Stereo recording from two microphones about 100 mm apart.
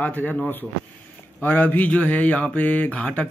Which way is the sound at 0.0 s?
20° left (ahead or behind).